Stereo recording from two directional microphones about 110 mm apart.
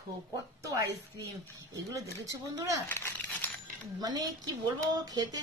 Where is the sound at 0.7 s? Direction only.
30° right (ahead or behind).